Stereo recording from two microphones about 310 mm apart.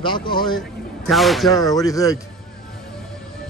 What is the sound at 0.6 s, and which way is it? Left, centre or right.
Speech, centre.